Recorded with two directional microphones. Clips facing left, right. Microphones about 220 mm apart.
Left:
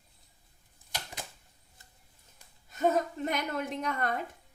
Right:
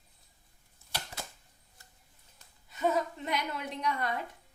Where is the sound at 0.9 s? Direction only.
15° left (ahead or behind).